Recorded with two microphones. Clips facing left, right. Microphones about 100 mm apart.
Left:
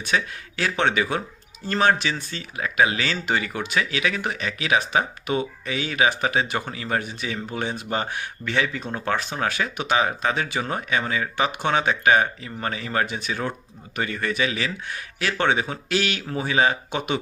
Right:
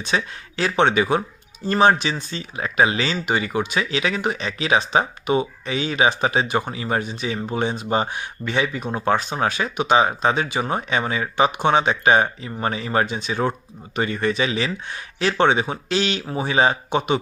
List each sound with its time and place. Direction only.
0.0 s speech: 20° right (ahead or behind)